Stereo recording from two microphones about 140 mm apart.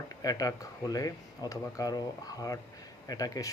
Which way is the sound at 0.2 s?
25° left (ahead or behind).